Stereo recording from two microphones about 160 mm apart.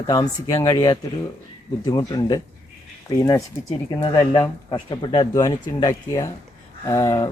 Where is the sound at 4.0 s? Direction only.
25° left (ahead or behind).